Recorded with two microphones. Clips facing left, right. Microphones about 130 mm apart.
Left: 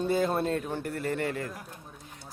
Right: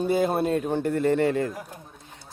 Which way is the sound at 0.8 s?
25° right (ahead or behind).